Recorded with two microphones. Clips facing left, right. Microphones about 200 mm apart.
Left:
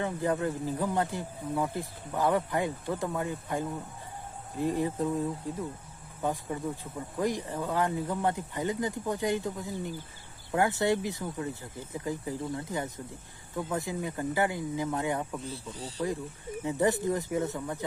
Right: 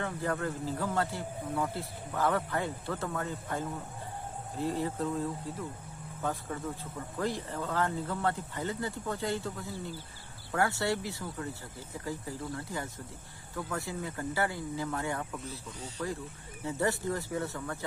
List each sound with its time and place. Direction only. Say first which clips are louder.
0.0 s speech: left 4 dB; 15° left (ahead or behind)
4.6 s speech: left 4 dB; 15° left (ahead or behind)
7.2 s speech: left 3 dB; 15° left (ahead or behind)
15.4 s speech: left 3 dB; 30° left (ahead or behind)
16.6 s speech: left 4 dB; 15° left (ahead or behind)